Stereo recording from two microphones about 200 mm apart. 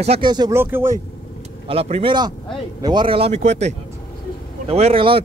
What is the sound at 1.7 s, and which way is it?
Speech, 30° right (ahead or behind).